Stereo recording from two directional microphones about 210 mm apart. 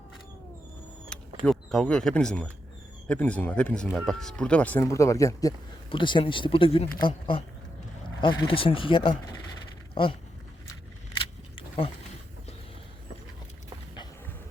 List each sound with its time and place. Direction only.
1.5 s speech: 5° left (ahead or behind); by 10.2 s 25° left (ahead or behind)
11.2 s keys jangling: 25° left (ahead or behind)